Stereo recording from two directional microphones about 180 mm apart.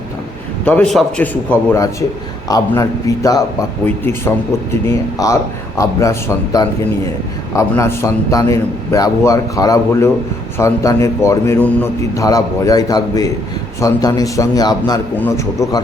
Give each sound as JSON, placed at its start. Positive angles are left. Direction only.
{"t": 0.6, "sound": "a man's voice", "side_deg": 10}